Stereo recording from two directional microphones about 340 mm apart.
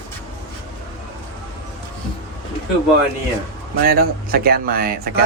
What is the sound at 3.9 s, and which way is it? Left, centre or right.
Speech, right.